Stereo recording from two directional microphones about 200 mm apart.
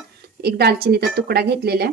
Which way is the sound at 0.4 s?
55° right (ahead or behind).